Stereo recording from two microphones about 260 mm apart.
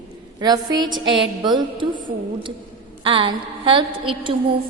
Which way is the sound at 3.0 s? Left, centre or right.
Centre.